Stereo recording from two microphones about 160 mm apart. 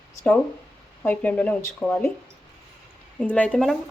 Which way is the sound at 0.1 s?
20° left (ahead or behind).